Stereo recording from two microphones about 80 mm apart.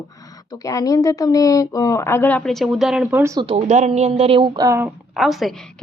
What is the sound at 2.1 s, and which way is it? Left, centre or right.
Speech, centre.